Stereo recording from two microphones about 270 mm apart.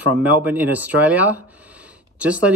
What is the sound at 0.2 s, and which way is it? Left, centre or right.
Speech, centre.